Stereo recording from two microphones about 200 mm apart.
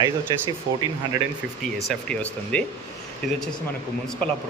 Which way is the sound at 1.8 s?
5° left (ahead or behind).